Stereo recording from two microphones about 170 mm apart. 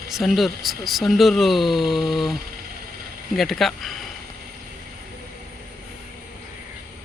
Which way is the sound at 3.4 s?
Centre (ahead or behind).